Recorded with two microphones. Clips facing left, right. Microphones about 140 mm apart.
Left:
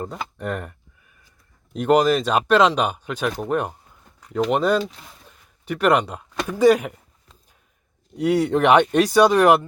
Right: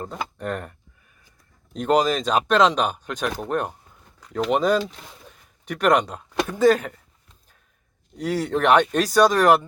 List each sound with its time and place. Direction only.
0.0 s speech: 5° left (ahead or behind)
1.7 s speech: 5° left (ahead or behind)
8.1 s speech: 10° left (ahead or behind)